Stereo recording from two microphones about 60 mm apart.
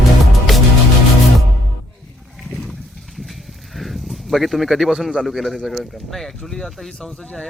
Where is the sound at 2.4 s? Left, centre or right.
Centre.